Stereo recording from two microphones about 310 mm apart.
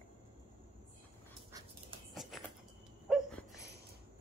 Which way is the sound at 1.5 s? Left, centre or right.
Centre.